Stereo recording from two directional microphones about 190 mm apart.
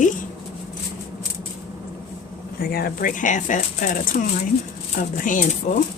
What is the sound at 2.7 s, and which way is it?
Speech, 50° left (ahead or behind).